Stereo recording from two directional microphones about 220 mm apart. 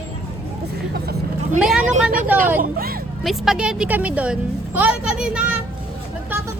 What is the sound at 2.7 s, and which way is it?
Speech, 45° right (ahead or behind).